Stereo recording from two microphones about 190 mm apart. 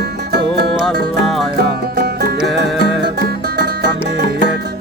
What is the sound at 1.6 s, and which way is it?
Music, 55° right (ahead or behind).